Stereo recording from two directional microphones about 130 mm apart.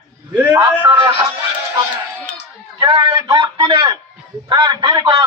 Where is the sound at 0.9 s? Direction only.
35° right (ahead or behind).